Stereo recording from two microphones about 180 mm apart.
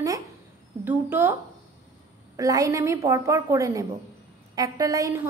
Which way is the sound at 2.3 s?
20° right (ahead or behind).